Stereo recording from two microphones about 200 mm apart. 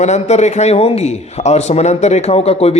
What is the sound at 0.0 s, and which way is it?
Speech, 35° left (ahead or behind).